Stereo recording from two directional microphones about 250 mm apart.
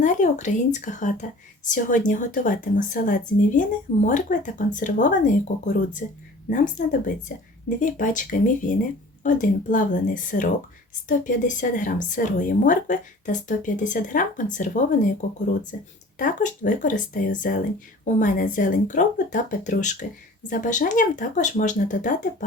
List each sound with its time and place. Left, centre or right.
0.0 s a woman's voice: left